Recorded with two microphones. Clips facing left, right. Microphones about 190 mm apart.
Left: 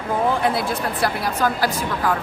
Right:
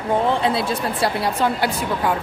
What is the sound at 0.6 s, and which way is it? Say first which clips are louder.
Speech: right 1 dB; 25° right (ahead or behind).